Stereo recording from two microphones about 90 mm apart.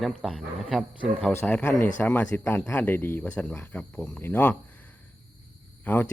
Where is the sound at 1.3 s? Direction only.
25° left (ahead or behind).